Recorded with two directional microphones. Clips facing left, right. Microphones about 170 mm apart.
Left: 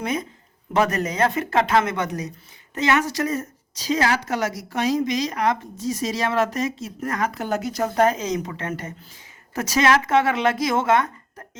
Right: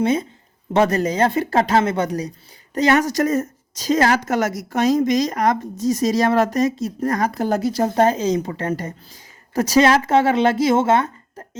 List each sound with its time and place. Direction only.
0.0 s a woman's voice: 30° right (ahead or behind)